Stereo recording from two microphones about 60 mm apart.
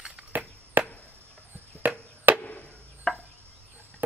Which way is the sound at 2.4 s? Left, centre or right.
Left.